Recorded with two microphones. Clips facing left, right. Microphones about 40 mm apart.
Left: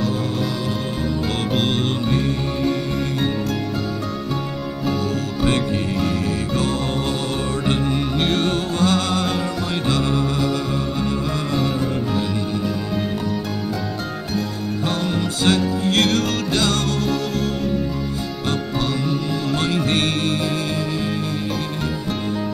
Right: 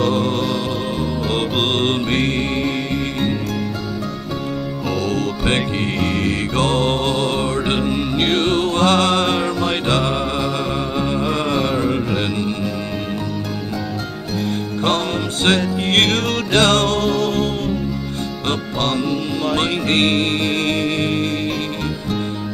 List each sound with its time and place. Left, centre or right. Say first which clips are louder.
0.0 s music: right 5 dB; right
1.7 s music: right 3 dB; right
6.0 s music: right 2 dB; right
7.5 s music: right 2 dB; right
11.1 s a sound: right 3 dB; right
15.4 s music: right 1 dB; right
19.5 s music: right 2 dB; right